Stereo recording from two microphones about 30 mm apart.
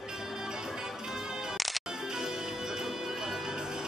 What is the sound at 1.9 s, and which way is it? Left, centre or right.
Music, centre.